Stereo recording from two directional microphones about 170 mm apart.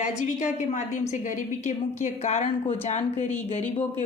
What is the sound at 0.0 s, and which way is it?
A woman's voice, 45° left (ahead or behind).